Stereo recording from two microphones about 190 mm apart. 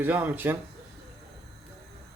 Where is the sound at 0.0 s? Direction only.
10° right (ahead or behind).